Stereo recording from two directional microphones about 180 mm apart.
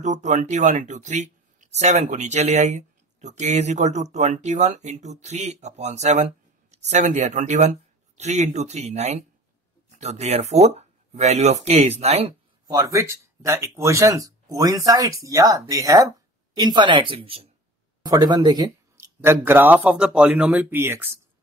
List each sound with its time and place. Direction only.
0.0 s speech: 40° right (ahead or behind)
12.6 s a man's voice: 20° right (ahead or behind)